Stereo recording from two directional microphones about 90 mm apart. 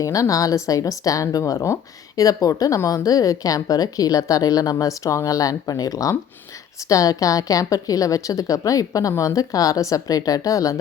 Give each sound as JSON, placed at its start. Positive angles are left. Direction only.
{"t": 0.0, "sound": "speech", "side_deg": 40}